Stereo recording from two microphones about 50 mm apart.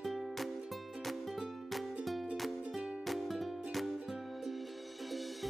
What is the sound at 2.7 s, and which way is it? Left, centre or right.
Music, centre.